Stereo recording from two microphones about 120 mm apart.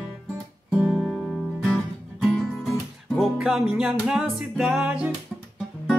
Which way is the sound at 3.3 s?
5° right (ahead or behind).